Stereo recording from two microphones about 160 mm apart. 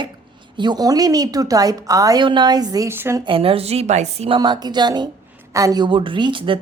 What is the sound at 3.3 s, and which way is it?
A woman's voice, 35° right (ahead or behind).